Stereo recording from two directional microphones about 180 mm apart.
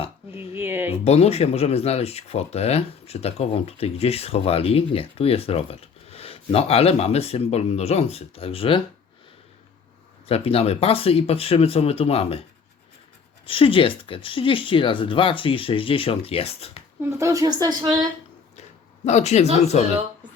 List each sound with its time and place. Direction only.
0.3 s a woman's voice: 10° right (ahead or behind)
0.9 s speech: 35° left (ahead or behind)
10.2 s speech: 35° left (ahead or behind)
13.4 s speech: 30° left (ahead or behind)
17.0 s a woman's voice: 15° right (ahead or behind)
19.0 s speech: 40° left (ahead or behind)